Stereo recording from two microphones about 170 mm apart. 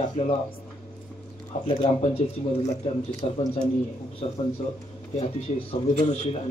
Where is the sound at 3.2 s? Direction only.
35° left (ahead or behind).